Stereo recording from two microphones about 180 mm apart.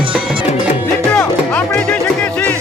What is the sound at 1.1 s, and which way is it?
Music, 5° left (ahead or behind).